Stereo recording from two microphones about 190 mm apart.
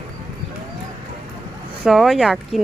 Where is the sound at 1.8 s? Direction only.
Centre (ahead or behind).